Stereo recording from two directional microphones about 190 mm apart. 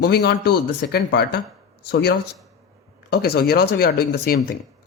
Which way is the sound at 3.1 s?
55° left (ahead or behind).